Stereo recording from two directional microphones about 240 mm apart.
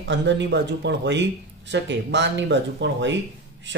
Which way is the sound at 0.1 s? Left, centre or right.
Right.